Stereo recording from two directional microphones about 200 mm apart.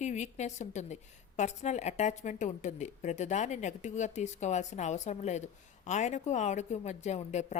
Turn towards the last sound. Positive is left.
turn(degrees=35)  # may be behind; listen again after turning